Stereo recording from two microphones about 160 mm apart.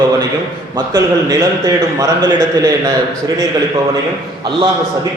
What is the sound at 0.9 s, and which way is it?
A man's voice, 20° right (ahead or behind).